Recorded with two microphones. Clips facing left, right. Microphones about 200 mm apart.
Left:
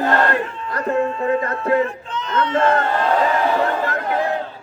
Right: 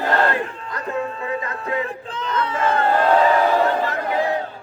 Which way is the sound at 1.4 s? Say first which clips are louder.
Left 7 dB; 45° left (ahead or behind).